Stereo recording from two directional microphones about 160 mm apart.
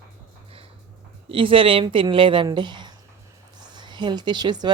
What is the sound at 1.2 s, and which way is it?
A woman's voice, 35° right (ahead or behind).